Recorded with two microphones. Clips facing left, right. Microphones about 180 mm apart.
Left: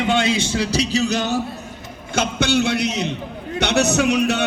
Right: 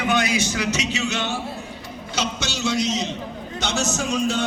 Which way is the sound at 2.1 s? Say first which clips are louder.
Left 9 dB; 55° left (ahead or behind).